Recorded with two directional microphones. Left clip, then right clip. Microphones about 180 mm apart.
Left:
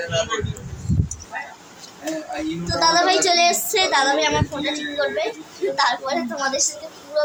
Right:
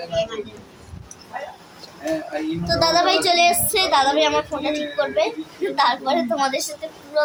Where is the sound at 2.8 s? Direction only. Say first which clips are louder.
Left 1 dB; 10° right (ahead or behind).